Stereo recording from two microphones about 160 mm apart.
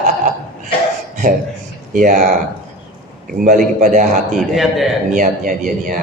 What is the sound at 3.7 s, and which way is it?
Speech, 50° right (ahead or behind).